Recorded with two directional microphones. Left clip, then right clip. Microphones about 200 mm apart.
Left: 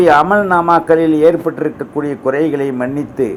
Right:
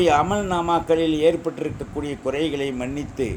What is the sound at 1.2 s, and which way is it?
Speech, centre (ahead or behind).